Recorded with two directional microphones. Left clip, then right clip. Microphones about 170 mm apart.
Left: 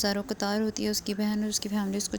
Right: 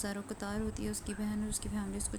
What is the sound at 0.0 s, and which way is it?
Speech, 40° left (ahead or behind).